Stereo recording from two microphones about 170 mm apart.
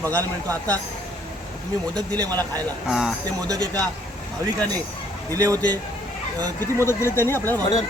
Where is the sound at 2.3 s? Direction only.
10° left (ahead or behind).